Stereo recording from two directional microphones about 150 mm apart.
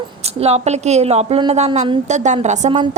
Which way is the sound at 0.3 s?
45° right (ahead or behind).